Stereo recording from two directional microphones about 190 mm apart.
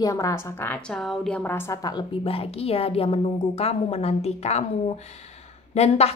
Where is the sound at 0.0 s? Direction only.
15° left (ahead or behind).